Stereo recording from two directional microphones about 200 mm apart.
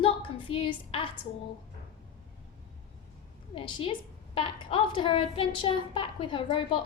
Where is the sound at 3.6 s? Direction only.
25° left (ahead or behind).